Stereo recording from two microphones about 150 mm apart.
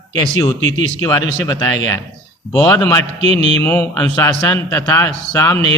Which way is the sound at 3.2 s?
40° right (ahead or behind).